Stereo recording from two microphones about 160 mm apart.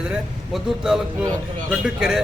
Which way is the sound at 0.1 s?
5° right (ahead or behind).